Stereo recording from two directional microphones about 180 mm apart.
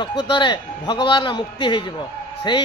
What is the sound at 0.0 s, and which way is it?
A man's voice, 25° left (ahead or behind).